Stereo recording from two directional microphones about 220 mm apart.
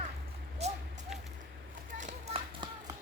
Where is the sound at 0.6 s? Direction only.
30° right (ahead or behind).